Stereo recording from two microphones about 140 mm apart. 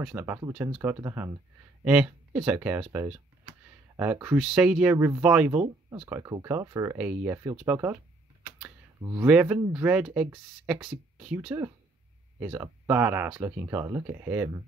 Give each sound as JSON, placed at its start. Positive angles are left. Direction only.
{"t": 0.0, "sound": "speech", "side_deg": -10}
{"t": 1.9, "sound": "speech", "side_deg": -10}
{"t": 4.9, "sound": "speech", "side_deg": -15}
{"t": 7.0, "sound": "speech", "side_deg": -10}
{"t": 9.2, "sound": "speech", "side_deg": -10}
{"t": 11.3, "sound": "speech", "side_deg": -15}